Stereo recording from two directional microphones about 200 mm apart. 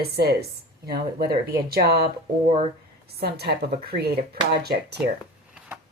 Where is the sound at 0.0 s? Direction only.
55° right (ahead or behind).